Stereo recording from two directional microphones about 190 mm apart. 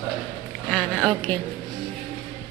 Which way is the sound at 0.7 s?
5° left (ahead or behind).